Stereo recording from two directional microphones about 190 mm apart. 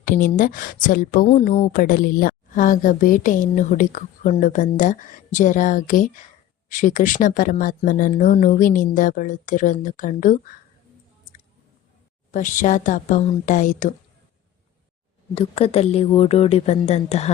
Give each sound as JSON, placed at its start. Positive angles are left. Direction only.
{"t": 0.0, "sound": "a woman's voice", "side_deg": 45}
{"t": 12.3, "sound": "a woman's voice", "side_deg": 40}
{"t": 15.4, "sound": "a woman's voice", "side_deg": 30}